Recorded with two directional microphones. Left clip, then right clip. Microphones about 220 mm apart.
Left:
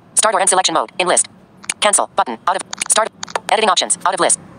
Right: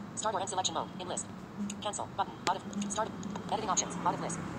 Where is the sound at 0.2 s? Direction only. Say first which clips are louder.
Left 19 dB; 55° left (ahead or behind).